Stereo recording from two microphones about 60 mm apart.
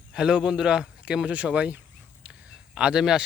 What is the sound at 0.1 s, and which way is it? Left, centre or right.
Speech, centre.